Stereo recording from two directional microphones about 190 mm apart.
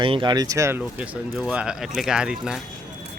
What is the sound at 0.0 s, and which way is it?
Speech, 25° right (ahead or behind).